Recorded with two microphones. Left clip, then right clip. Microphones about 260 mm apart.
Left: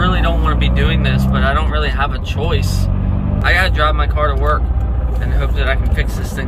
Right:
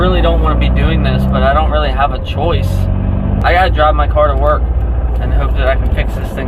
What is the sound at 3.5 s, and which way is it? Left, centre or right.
Speech, centre.